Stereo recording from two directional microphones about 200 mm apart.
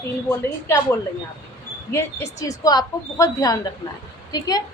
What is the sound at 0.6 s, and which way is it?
A woman's voice, 15° left (ahead or behind).